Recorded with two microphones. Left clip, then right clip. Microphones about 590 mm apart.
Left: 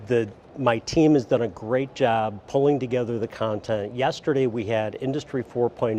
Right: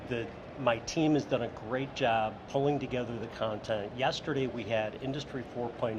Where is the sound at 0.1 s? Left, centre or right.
Left.